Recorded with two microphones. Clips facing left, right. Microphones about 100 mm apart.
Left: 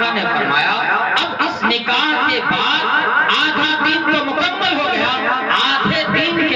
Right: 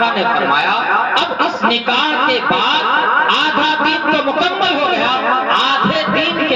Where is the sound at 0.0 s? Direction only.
45° right (ahead or behind).